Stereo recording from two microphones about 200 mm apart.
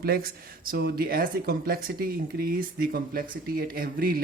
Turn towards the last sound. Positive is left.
turn(degrees=-45)  # may be behind; listen again after turning